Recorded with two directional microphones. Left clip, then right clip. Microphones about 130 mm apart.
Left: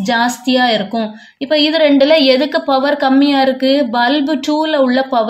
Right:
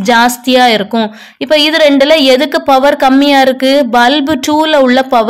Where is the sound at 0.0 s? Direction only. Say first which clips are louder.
Right 6 dB; 55° right (ahead or behind).